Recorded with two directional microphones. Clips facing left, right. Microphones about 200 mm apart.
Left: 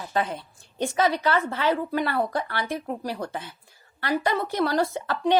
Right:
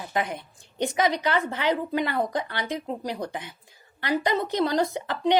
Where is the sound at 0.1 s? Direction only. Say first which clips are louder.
Left 2 dB; 15° right (ahead or behind).